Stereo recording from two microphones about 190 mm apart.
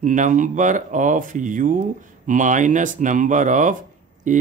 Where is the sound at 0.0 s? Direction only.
40° right (ahead or behind).